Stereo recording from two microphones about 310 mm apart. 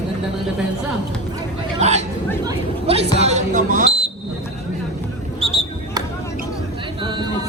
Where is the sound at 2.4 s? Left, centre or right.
Centre.